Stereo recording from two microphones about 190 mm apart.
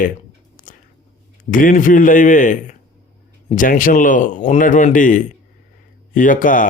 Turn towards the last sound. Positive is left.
turn(degrees=45)  # may be behind; listen again after turning